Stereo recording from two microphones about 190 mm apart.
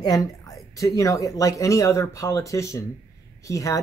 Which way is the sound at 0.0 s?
20° left (ahead or behind).